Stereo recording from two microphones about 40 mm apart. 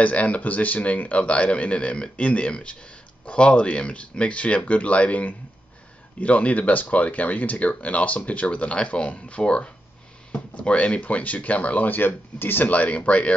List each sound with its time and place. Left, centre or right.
0.0 s speech: left
11.9 s speech: left
12.6 s speech: left